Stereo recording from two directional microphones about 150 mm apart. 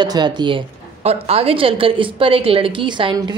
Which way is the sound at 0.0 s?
30° right (ahead or behind).